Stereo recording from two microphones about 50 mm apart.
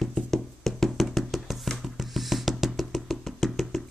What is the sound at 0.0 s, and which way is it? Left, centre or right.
Music, centre.